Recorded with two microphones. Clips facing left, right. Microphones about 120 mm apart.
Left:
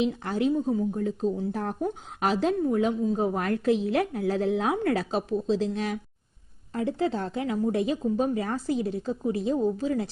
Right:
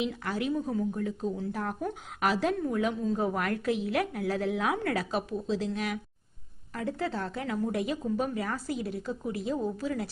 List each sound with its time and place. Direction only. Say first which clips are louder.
0.0 s speech: left 6 dB; 25° left (ahead or behind)